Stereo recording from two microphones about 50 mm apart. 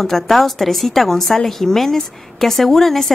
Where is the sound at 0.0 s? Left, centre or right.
Centre.